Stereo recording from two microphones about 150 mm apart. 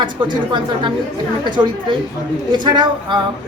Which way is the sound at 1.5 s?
30° right (ahead or behind).